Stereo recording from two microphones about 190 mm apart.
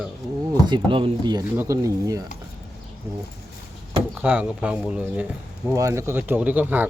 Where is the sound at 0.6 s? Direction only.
25° right (ahead or behind).